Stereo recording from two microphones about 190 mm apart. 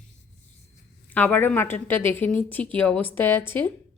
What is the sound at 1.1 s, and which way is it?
Speech, 10° left (ahead or behind).